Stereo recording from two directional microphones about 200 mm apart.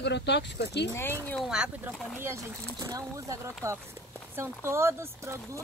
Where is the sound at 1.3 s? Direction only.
Centre (ahead or behind).